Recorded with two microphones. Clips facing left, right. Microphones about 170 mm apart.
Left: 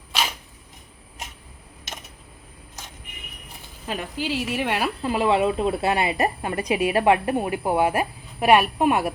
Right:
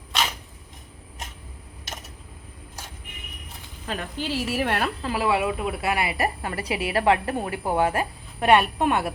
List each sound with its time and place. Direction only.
3.8 s speech: 15° left (ahead or behind)
4.2 s a woman's voice: centre (ahead or behind)
5.0 s speech: 20° left (ahead or behind)